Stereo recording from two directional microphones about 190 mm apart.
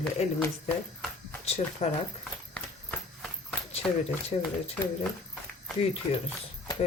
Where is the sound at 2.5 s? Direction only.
5° left (ahead or behind).